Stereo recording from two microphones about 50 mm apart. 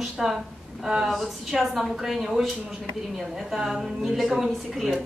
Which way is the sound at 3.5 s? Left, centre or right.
Centre.